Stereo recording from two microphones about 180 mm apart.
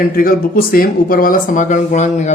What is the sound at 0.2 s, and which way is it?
A man's voice, 50° left (ahead or behind).